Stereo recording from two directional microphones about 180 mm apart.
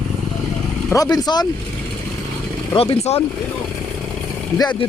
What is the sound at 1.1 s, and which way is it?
Speech, 20° left (ahead or behind).